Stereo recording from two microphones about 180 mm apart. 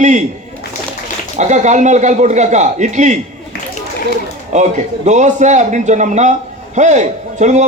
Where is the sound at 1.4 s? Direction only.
40° right (ahead or behind).